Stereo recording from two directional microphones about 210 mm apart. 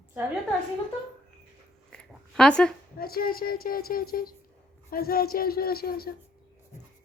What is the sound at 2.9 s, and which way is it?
Speech, 45° left (ahead or behind).